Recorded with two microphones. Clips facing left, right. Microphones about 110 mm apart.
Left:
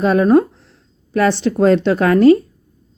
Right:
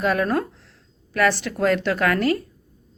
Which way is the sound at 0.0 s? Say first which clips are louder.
Left 9 dB; 25° left (ahead or behind).